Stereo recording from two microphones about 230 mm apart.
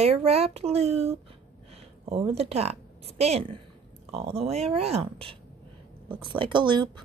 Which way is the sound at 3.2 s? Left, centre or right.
Right.